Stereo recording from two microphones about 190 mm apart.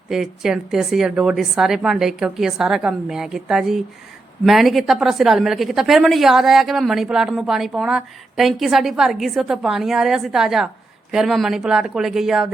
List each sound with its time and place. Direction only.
0.1 s a woman's voice: 5° right (ahead or behind)